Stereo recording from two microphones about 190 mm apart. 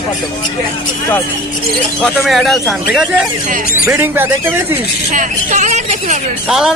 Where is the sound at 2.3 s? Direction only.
Centre (ahead or behind).